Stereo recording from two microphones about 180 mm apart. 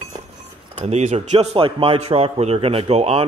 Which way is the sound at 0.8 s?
40° right (ahead or behind).